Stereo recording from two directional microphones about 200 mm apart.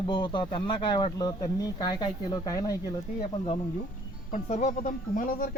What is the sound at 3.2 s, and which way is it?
Speech, 30° left (ahead or behind).